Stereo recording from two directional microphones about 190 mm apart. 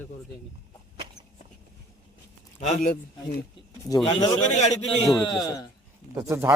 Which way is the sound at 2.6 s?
35° left (ahead or behind).